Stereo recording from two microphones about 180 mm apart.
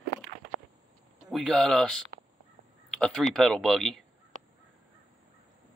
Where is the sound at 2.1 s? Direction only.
60° right (ahead or behind).